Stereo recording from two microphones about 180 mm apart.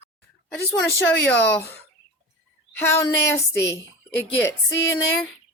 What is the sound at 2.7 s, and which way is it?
Speech, 15° left (ahead or behind).